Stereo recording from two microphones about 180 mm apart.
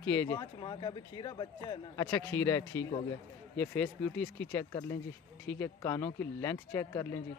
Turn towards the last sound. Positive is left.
turn(degrees=15)  # may be behind; listen again after turning